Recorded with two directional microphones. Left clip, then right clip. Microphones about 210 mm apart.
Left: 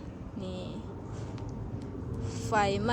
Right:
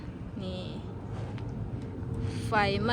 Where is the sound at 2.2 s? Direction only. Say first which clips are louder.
Even; 15° left (ahead or behind).